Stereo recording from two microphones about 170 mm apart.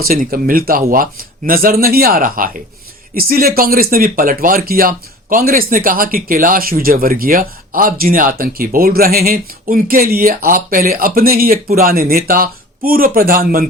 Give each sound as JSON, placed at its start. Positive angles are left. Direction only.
{"t": 0.0, "sound": "speech", "side_deg": -60}